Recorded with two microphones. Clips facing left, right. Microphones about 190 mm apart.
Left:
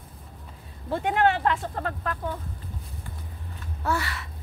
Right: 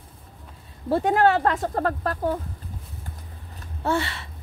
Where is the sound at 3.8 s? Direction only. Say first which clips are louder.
Right 4 dB; 25° right (ahead or behind).